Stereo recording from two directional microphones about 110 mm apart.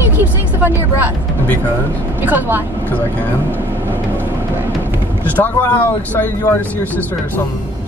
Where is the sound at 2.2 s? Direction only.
15° right (ahead or behind).